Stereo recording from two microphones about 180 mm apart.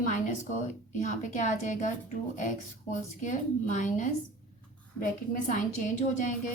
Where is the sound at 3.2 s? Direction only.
45° left (ahead or behind).